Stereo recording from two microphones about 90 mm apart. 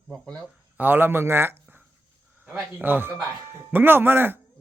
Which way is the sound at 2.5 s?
5° right (ahead or behind).